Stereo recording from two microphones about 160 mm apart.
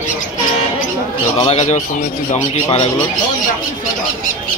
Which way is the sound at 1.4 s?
45° left (ahead or behind).